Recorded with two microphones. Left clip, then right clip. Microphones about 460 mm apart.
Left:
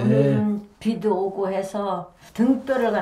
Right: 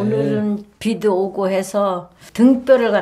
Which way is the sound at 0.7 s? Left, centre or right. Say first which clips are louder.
Right 6 dB; right.